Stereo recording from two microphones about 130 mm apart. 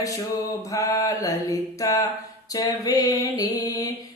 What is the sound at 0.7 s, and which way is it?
Mantra, 25° left (ahead or behind).